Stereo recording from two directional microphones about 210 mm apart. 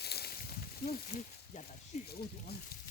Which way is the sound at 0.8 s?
35° left (ahead or behind).